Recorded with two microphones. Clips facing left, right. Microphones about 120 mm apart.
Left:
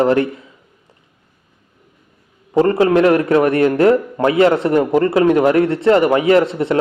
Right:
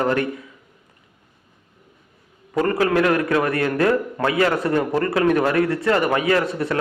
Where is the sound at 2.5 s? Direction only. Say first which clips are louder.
Left 6 dB; 25° left (ahead or behind).